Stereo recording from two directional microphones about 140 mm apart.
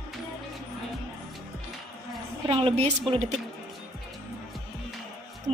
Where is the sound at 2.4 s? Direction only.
35° right (ahead or behind).